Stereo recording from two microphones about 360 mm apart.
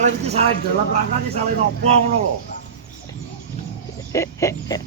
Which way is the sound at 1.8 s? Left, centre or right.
Centre.